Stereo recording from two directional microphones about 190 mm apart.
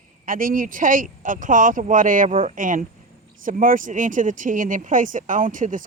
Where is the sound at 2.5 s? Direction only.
45° right (ahead or behind).